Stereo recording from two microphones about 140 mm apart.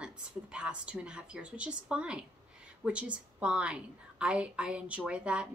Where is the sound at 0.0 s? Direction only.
5° right (ahead or behind).